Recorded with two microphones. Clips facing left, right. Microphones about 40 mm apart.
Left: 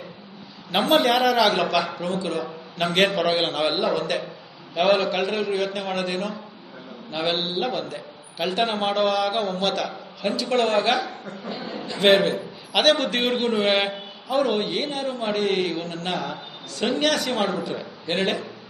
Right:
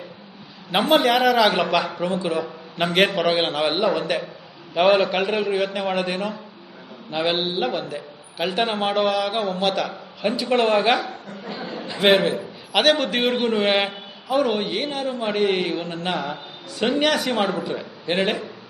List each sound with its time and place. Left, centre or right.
0.7 s a man's voice: centre
11.4 s a sound: right
12.0 s a man's voice: centre